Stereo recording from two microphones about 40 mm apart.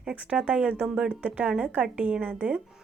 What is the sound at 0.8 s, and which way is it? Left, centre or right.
Speech, centre.